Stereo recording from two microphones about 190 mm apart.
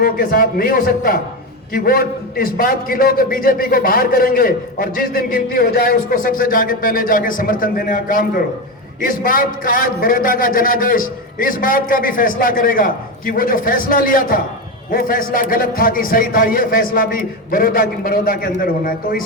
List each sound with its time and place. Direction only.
0.0 s a man's voice: 50° left (ahead or behind)